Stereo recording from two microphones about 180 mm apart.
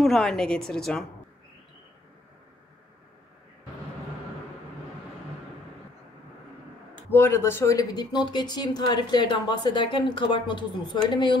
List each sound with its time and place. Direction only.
0.0 s a woman's voice: 5° left (ahead or behind)
7.1 s speech: 15° left (ahead or behind)